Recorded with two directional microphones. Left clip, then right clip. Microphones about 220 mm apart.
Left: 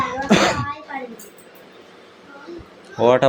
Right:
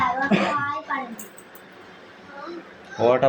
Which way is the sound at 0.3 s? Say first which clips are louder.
Left 6 dB; 35° left (ahead or behind).